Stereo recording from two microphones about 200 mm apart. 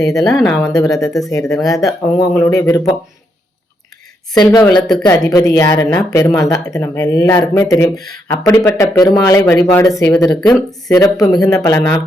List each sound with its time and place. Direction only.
0.3 s speech: 10° left (ahead or behind)
4.3 s speech: 20° left (ahead or behind)